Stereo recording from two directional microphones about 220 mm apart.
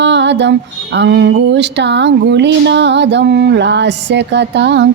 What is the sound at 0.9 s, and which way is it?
Speech, 50° right (ahead or behind).